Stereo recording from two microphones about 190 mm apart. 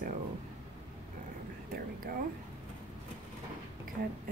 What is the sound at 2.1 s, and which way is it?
Speech, 50° right (ahead or behind).